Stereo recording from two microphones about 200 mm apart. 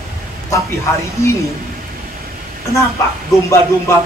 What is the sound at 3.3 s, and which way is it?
Speech, 15° left (ahead or behind).